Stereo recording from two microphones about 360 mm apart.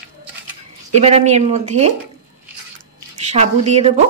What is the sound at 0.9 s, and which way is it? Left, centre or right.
Speech, centre.